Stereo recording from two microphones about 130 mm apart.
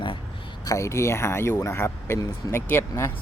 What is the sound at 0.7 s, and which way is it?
Speech, 20° left (ahead or behind).